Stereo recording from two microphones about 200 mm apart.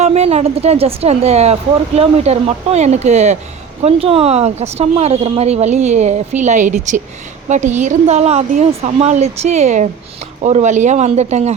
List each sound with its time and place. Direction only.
0.0 s speech: 30° right (ahead or behind)